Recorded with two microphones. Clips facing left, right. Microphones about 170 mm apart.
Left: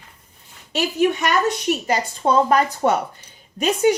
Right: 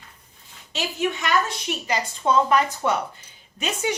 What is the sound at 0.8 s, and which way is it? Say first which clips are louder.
A woman's voice: left 7 dB; 60° left (ahead or behind).